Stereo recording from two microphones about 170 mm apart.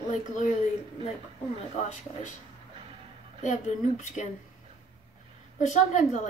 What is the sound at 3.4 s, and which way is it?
Speech, 45° left (ahead or behind).